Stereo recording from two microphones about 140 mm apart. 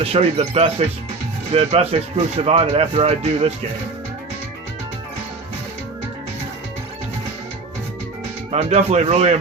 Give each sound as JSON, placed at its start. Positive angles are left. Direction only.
{"t": 0.0, "sound": "speech", "side_deg": -45}
{"t": 8.5, "sound": "speech", "side_deg": -50}